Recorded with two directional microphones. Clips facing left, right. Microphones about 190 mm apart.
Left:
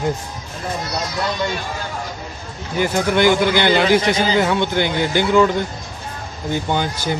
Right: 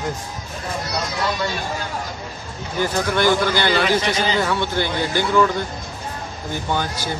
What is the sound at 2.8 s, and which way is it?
A man's voice, 15° left (ahead or behind).